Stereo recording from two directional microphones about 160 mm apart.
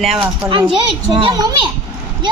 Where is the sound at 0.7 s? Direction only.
30° right (ahead or behind).